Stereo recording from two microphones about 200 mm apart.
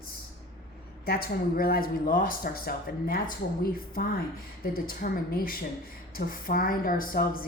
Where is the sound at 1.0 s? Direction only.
50° left (ahead or behind).